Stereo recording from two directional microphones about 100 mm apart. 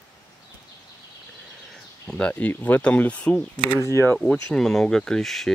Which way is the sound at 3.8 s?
25° left (ahead or behind).